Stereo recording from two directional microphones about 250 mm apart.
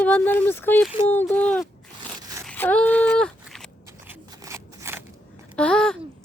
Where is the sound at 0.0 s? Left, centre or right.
Centre.